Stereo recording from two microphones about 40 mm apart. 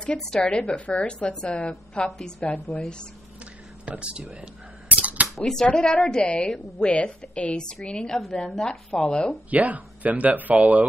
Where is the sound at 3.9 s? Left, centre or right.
Right.